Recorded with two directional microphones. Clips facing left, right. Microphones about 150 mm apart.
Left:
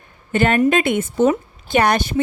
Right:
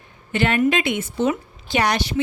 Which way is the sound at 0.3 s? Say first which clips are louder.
Left 3 dB; 45° left (ahead or behind).